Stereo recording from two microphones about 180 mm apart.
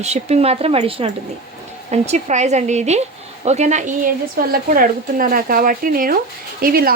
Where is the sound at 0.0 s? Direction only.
35° right (ahead or behind).